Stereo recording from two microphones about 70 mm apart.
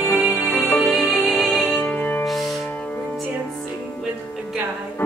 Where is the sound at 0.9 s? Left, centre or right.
Centre.